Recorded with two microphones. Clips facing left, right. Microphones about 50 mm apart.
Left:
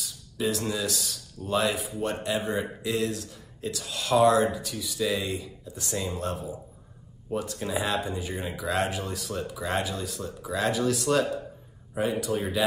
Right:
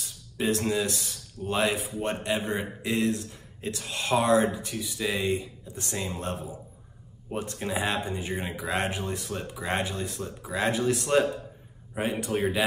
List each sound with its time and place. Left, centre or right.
0.0 s speech: right